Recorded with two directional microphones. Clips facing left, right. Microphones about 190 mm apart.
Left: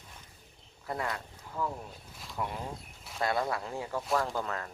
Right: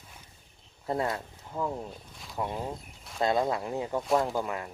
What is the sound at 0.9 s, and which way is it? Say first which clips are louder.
Speech: right 5 dB; 25° right (ahead or behind).